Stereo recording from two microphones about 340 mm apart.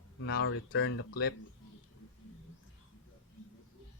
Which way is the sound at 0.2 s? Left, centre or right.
Left.